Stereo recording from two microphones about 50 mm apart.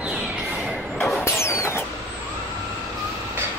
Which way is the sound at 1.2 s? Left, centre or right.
Left.